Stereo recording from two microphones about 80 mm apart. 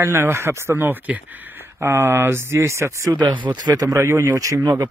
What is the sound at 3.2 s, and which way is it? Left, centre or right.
Speech, right.